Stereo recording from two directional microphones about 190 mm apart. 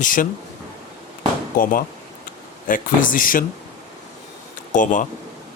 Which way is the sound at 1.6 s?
45° left (ahead or behind).